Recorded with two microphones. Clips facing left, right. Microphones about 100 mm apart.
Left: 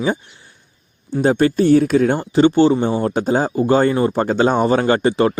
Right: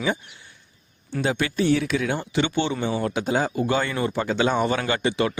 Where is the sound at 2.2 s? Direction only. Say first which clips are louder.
Left 11 dB; 35° left (ahead or behind).